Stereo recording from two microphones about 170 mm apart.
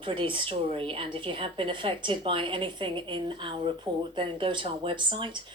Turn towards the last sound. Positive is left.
turn(degrees=-30)  # may be behind; listen again after turning